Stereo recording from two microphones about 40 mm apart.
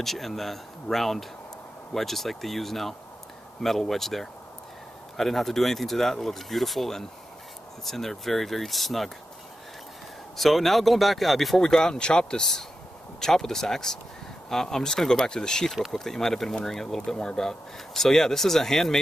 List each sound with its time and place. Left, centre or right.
0.0 s speech: centre
10.3 s speech: centre